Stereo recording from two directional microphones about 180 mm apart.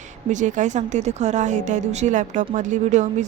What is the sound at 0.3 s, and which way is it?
Speech, 45° right (ahead or behind).